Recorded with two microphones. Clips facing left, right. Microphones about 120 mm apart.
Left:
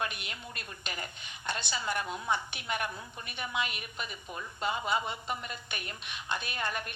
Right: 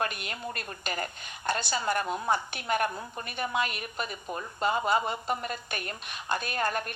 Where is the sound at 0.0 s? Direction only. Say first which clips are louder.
Right 5 dB; 45° right (ahead or behind).